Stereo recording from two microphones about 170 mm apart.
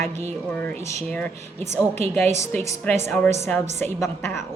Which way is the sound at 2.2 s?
15° left (ahead or behind).